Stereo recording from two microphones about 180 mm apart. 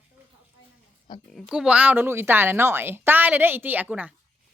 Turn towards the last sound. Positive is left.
turn(degrees=-10)  # may be behind; listen again after turning